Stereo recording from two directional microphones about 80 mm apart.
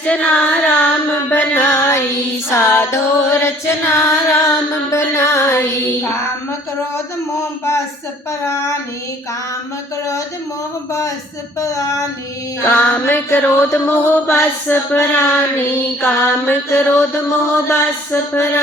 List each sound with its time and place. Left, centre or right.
0.0 s child singing: centre
1.3 s music: left
12.6 s speech: left
17.2 s music: left